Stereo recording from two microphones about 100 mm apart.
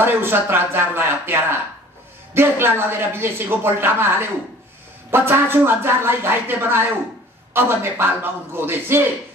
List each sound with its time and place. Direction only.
0.0 s a woman's voice: 25° right (ahead or behind)